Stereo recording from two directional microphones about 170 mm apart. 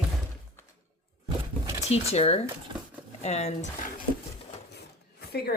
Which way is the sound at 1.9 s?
35° left (ahead or behind).